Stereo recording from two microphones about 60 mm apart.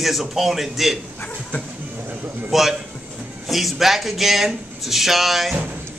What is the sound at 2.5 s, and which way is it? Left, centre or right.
A man's voice, centre.